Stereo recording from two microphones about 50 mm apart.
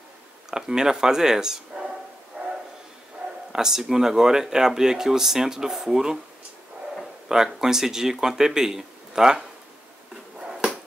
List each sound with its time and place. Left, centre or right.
0.5 s speech: centre
2.4 s bow-wow: right
3.2 s dog: centre
3.5 s speech: centre
7.2 s speech: centre
10.4 s dog: centre